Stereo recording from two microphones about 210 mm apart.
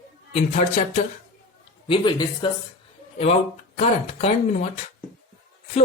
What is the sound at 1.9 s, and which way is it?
Speech, 20° left (ahead or behind).